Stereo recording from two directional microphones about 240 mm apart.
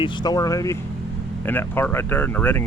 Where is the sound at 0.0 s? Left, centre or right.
Centre.